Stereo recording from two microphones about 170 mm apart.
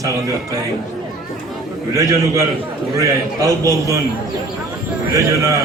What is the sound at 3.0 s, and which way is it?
A man's voice, 20° right (ahead or behind).